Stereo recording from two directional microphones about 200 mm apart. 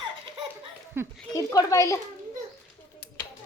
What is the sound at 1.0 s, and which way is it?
Speech, 10° right (ahead or behind).